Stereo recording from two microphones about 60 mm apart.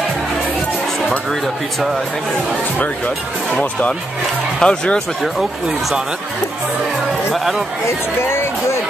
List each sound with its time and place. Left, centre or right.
4.6 s speech: centre
7.3 s a man's voice: centre
8.3 s speech: left